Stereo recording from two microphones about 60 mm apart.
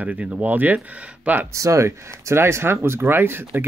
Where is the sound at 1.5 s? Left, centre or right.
Right.